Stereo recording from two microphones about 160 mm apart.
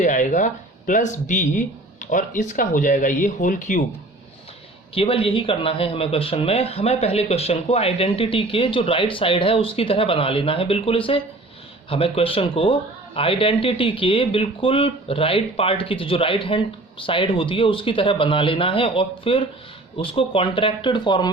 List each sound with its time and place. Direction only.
0.0 s speech: 50° left (ahead or behind)
4.9 s a man's voice: 35° left (ahead or behind)